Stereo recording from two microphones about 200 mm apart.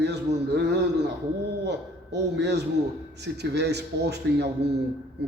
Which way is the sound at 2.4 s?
55° right (ahead or behind).